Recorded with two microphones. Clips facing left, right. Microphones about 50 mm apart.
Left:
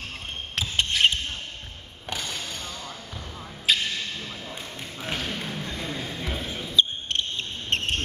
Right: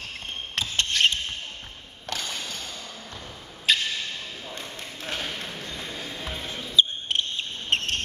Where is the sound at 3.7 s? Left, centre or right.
Centre.